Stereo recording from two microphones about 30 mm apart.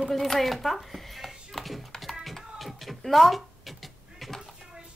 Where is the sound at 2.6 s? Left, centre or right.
Centre.